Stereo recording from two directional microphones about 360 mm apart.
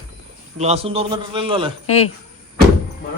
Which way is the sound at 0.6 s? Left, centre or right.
Centre.